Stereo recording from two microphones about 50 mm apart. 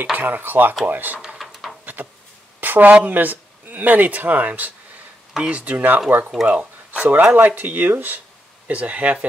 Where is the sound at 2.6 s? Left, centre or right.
Right.